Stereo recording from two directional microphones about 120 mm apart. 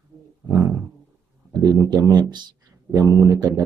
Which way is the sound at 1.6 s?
30° right (ahead or behind).